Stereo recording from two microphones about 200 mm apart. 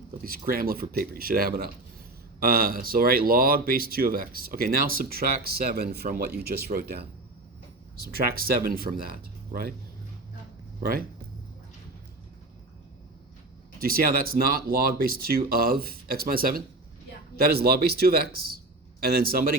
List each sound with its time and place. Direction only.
0.3 s speech: 45° right (ahead or behind)
13.7 s speech: 45° right (ahead or behind)